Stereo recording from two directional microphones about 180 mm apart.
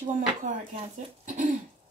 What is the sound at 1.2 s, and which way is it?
Throat clearing, 45° right (ahead or behind).